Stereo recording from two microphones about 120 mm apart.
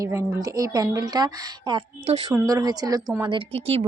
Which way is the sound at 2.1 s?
60° right (ahead or behind).